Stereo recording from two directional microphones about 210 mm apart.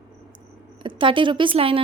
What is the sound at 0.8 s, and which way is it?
Speech, 25° right (ahead or behind).